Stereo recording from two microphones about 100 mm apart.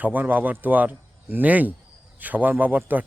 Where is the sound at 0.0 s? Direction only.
15° right (ahead or behind).